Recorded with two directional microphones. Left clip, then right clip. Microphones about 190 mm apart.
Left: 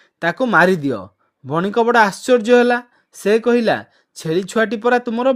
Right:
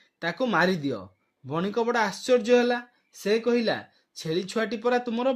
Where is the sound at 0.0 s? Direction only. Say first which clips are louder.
Left 9 dB; 35° left (ahead or behind).